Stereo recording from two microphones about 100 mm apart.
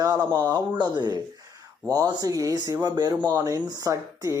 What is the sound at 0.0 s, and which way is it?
Speech, 45° right (ahead or behind).